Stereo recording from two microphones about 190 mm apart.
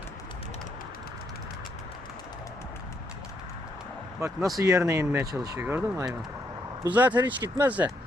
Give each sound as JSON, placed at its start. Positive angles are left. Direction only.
{"t": 4.2, "sound": "speech", "side_deg": -15}